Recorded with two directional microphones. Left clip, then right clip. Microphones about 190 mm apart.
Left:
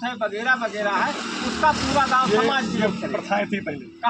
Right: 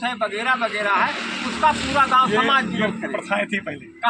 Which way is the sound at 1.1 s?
60° left (ahead or behind).